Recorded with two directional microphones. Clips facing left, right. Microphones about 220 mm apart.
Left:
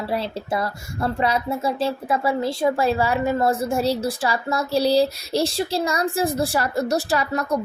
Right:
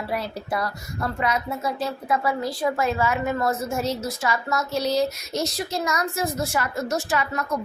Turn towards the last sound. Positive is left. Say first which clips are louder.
# left 3 dB
turn(degrees=35)  # may be behind; listen again after turning